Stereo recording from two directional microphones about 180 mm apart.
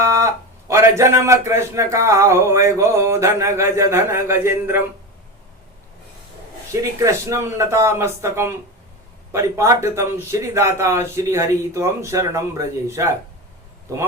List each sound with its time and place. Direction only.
0.0 s a man's voice: 15° right (ahead or behind)
6.7 s a man's voice: 15° right (ahead or behind)